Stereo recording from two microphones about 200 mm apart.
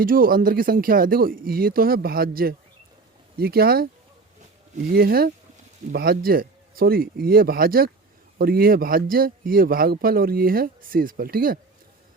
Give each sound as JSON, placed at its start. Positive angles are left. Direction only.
{"t": 0.0, "sound": "a man's voice", "side_deg": -45}
{"t": 4.9, "sound": "a man's voice", "side_deg": -50}